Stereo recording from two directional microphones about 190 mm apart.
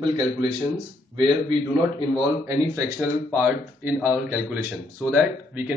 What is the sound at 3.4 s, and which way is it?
A man's voice, 10° right (ahead or behind).